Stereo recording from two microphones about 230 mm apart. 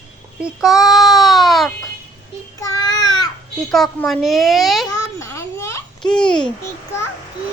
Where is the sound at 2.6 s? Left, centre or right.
Centre.